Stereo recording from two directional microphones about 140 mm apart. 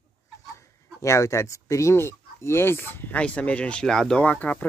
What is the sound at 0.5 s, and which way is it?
Speech, 20° left (ahead or behind).